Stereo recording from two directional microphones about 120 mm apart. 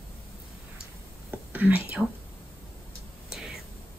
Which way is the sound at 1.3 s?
10° right (ahead or behind).